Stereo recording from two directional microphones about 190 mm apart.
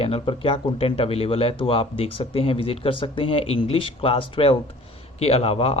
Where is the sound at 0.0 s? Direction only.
30° left (ahead or behind).